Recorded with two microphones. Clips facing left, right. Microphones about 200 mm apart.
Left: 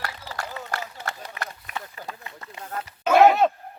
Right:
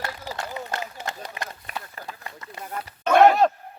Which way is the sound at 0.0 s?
20° right (ahead or behind).